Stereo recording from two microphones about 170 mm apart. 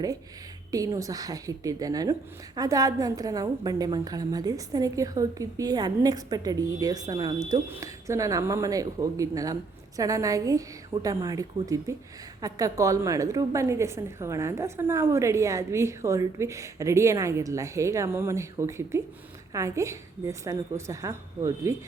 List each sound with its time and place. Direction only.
0.7 s a woman's voice: 20° right (ahead or behind)